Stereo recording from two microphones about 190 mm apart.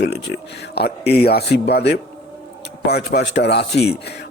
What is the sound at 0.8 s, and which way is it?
Speech, 60° left (ahead or behind).